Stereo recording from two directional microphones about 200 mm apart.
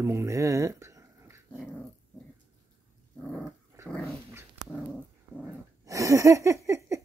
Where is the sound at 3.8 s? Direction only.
5° left (ahead or behind).